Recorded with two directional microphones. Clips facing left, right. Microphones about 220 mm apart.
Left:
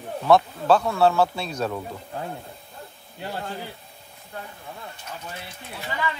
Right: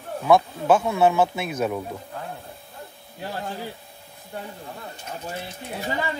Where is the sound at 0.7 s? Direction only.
20° right (ahead or behind).